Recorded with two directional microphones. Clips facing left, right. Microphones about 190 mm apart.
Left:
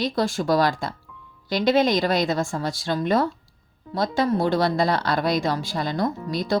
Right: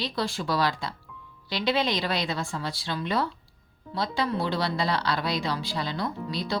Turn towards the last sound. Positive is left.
turn(degrees=45)  # may be behind; listen again after turning